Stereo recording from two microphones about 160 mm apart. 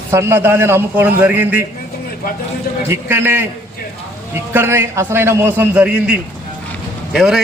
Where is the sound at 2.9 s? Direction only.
15° right (ahead or behind).